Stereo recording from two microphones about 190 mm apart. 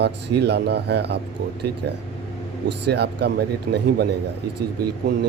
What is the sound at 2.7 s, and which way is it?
Speech, 60° right (ahead or behind).